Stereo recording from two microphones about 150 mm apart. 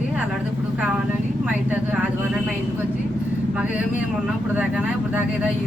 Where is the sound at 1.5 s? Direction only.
10° right (ahead or behind).